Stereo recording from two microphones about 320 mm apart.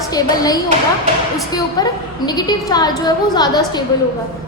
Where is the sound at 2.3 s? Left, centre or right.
Centre.